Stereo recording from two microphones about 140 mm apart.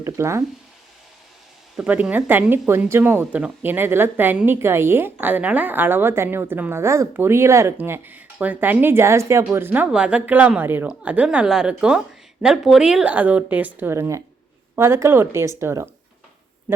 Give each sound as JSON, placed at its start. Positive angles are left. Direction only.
{"t": 0.0, "sound": "speech", "side_deg": -20}
{"t": 1.7, "sound": "speech", "side_deg": -10}